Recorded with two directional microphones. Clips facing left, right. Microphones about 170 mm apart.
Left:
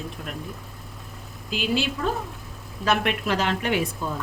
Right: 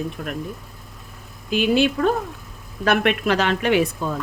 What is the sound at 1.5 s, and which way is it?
Speech, 55° right (ahead or behind).